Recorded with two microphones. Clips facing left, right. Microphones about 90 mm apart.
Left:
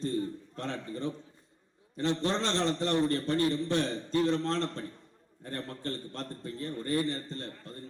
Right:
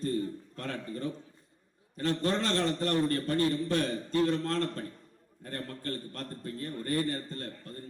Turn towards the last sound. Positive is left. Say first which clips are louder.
# even
turn(degrees=25)  # may be behind; listen again after turning